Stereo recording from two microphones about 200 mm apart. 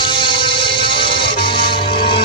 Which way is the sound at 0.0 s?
25° left (ahead or behind).